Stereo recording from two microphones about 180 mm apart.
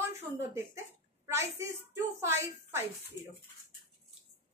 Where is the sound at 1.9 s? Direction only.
15° right (ahead or behind).